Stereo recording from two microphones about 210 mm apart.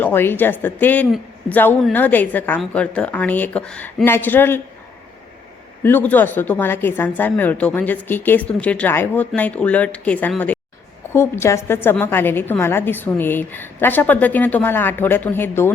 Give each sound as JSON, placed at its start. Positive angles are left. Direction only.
{"t": 0.0, "sound": "a woman's voice", "side_deg": 10}
{"t": 5.8, "sound": "a woman's voice", "side_deg": 10}